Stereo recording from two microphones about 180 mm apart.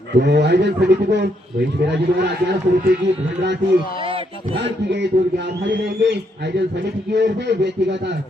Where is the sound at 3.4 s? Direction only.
70° right (ahead or behind).